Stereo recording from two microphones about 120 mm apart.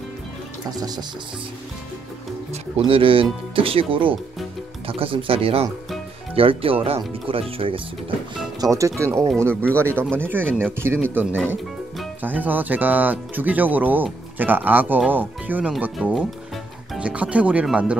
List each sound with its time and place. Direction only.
0.7 s speech: 30° right (ahead or behind)
2.8 s speech: 50° right (ahead or behind)
8.5 s speech: 25° right (ahead or behind); by 17.9 s 10° right (ahead or behind)